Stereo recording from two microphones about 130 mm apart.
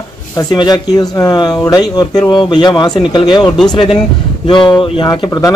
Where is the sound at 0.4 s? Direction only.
30° left (ahead or behind).